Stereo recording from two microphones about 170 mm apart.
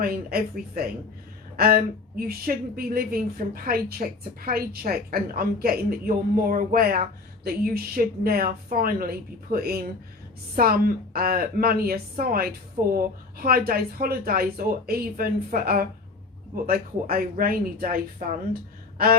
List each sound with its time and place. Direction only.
0.0 s a woman's voice: 60° right (ahead or behind)